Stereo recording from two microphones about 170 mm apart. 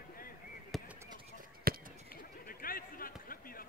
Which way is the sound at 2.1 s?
60° left (ahead or behind).